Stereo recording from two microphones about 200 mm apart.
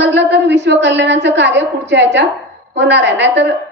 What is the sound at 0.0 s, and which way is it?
A woman's voice, 60° right (ahead or behind).